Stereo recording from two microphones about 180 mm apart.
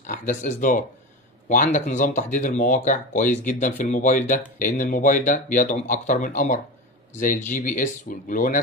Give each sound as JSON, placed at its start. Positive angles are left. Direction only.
{"t": 0.0, "sound": "speech", "side_deg": 45}